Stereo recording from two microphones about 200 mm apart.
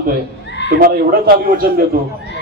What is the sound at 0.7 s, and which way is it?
Speech, 50° right (ahead or behind).